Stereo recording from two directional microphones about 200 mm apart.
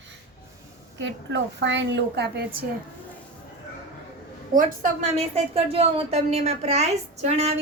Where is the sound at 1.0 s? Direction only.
60° right (ahead or behind).